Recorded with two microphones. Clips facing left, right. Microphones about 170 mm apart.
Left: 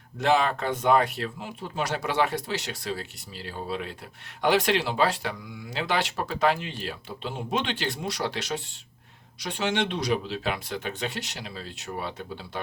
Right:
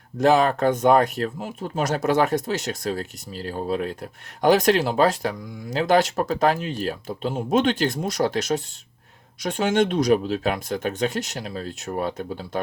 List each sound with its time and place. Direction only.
0.2 s speech: 40° right (ahead or behind)